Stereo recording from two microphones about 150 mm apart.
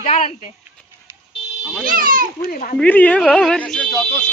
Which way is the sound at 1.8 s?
70° right (ahead or behind).